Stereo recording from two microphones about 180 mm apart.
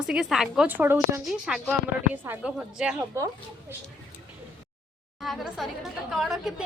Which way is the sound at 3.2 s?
15° right (ahead or behind).